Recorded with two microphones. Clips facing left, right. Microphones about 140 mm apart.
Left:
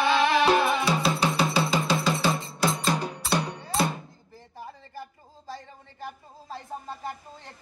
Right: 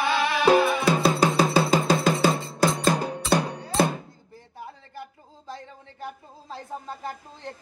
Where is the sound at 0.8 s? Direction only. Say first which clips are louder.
Right 4 dB; 45° right (ahead or behind).